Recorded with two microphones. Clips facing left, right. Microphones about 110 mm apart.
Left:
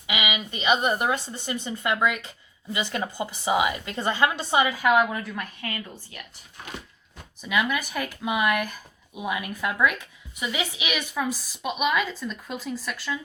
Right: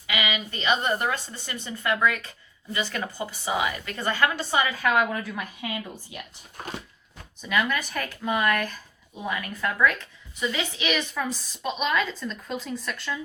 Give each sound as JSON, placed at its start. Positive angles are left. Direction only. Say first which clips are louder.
{"t": 0.1, "sound": "a woman's voice", "louder": "even", "side_deg": 15}
{"t": 5.1, "sound": "speech", "louder": "even", "side_deg": 0}
{"t": 7.4, "sound": "speech", "louder": "even", "side_deg": 5}